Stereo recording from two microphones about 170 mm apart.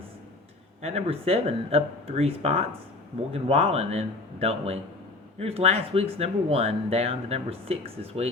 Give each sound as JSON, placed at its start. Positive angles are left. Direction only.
{"t": 0.8, "sound": "speech", "side_deg": -35}